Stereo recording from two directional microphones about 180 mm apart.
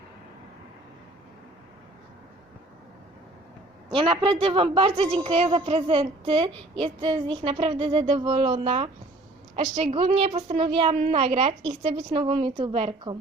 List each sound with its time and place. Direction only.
3.9 s a woman's voice: 30° right (ahead or behind)